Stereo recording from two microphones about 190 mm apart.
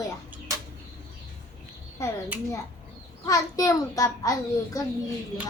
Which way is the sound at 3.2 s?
20° left (ahead or behind).